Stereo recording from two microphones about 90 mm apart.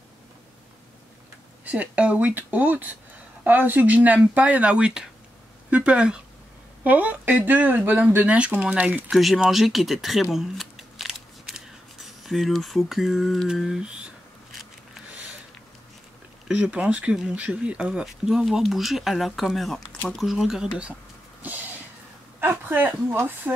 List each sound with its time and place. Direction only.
1.6 s speech: 15° right (ahead or behind)
9.1 s speech: centre (ahead or behind)
16.4 s speech: 10° right (ahead or behind)
21.4 s speech: 20° right (ahead or behind)